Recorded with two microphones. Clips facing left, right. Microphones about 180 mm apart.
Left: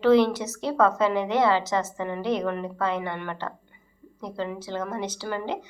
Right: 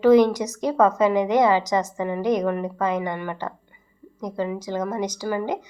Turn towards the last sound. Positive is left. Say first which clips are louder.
# right 5 dB
turn(degrees=-15)  # may be behind; listen again after turning